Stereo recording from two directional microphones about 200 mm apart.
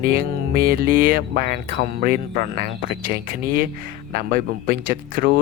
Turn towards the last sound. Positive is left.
turn(degrees=-45)  # may be behind; listen again after turning